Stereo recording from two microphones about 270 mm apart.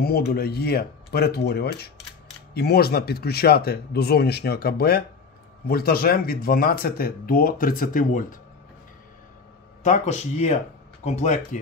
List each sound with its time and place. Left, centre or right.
0.0 s speech: left
9.8 s speech: left